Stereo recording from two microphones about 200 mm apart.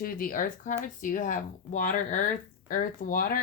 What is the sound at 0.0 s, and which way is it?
Speech, 45° left (ahead or behind).